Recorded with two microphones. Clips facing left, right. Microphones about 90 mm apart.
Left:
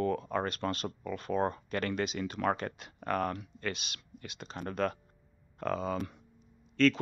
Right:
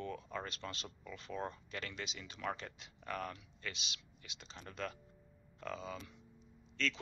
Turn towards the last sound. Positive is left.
turn(degrees=55)  # may be behind; listen again after turning